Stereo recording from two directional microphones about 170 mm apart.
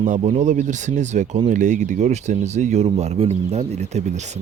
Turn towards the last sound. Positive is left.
turn(degrees=-40)  # may be behind; listen again after turning